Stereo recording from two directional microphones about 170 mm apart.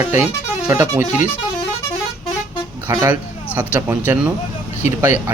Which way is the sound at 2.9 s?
20° right (ahead or behind).